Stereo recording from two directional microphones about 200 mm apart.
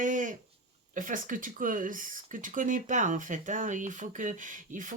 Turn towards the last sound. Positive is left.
turn(degrees=-40)  # may be behind; listen again after turning